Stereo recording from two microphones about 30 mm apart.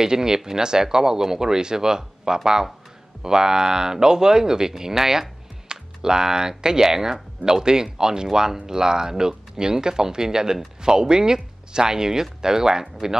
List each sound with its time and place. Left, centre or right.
0.0 s speech: right